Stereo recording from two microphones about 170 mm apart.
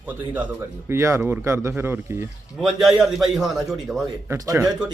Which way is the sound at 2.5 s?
Centre (ahead or behind).